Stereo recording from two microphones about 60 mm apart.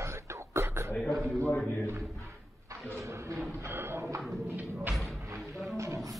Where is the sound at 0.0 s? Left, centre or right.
Right.